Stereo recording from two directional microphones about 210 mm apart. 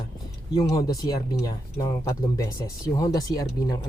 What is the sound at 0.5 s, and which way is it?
Speech, 15° left (ahead or behind).